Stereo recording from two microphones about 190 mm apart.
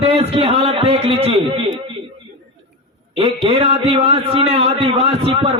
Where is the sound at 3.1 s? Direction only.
30° right (ahead or behind).